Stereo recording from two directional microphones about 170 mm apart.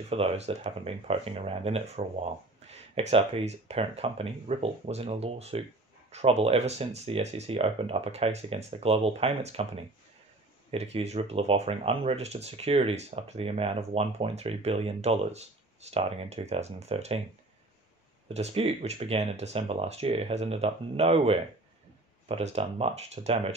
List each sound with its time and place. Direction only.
0.1 s speech: 35° right (ahead or behind)
18.3 s speech: 40° right (ahead or behind)